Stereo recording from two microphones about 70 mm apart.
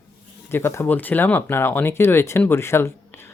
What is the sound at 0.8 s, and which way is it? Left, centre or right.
Speech, left.